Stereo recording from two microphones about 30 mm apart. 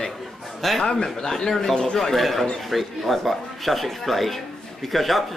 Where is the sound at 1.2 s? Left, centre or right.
Left.